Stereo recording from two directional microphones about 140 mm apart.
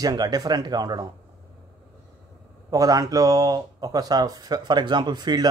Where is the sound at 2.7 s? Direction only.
25° right (ahead or behind).